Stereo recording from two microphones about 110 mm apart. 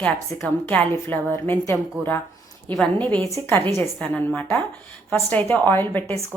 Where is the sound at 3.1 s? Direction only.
5° left (ahead or behind).